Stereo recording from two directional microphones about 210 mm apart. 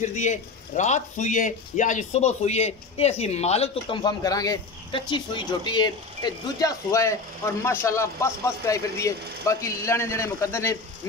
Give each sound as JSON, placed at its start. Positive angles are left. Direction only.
{"t": 0.0, "sound": "speech", "side_deg": 35}